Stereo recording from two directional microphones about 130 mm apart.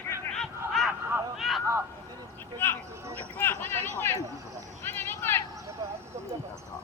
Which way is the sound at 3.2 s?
15° left (ahead or behind).